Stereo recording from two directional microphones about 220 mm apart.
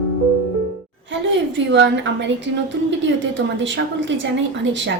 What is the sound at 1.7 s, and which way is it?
A woman's voice, 55° right (ahead or behind).